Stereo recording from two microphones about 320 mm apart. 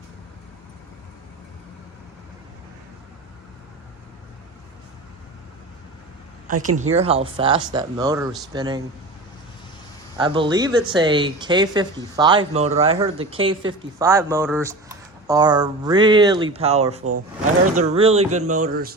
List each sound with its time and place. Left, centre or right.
6.5 s speech: right
10.2 s speech: centre
17.0 s speech: right
17.9 s speech: centre